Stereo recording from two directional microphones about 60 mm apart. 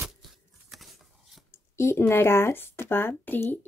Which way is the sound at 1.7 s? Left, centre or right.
Left.